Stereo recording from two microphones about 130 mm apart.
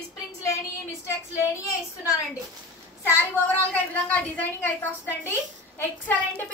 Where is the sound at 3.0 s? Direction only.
15° left (ahead or behind).